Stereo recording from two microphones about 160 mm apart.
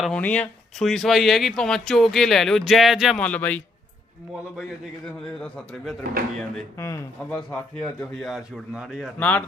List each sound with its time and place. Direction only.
0.0 s speech: 5° left (ahead or behind)
5.4 s speech: centre (ahead or behind)
6.7 s speech: 20° left (ahead or behind)
7.3 s speech: 5° left (ahead or behind)
9.1 s speech: 10° left (ahead or behind)